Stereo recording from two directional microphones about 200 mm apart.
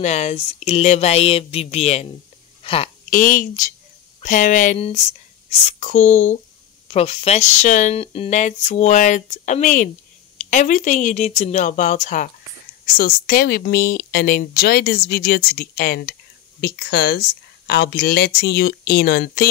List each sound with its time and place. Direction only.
0.0 s speech: 35° left (ahead or behind)
3.1 s speech: 45° left (ahead or behind)